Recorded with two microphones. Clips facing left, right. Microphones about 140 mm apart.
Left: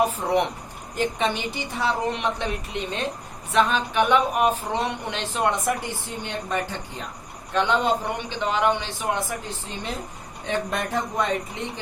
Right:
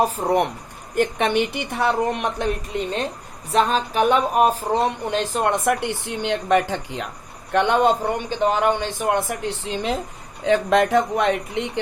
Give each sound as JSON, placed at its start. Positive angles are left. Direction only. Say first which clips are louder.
{"t": 0.0, "sound": "speech", "louder": "right 2 dB", "side_deg": -40}
{"t": 0.9, "sound": "a woman's voice", "louder": "right 5 dB", "side_deg": -60}
{"t": 3.5, "sound": "speech", "louder": "right 2 dB", "side_deg": -35}
{"t": 5.6, "sound": "speech", "louder": "right 5 dB", "side_deg": -70}
{"t": 7.5, "sound": "a woman's voice", "louder": "right 4 dB", "side_deg": -55}
{"t": 8.3, "sound": "speech", "louder": "right 3 dB", "side_deg": -45}